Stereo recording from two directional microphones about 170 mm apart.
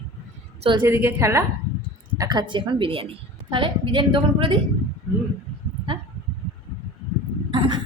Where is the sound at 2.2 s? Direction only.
25° right (ahead or behind).